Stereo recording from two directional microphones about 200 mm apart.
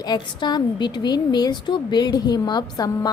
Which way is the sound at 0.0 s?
20° left (ahead or behind).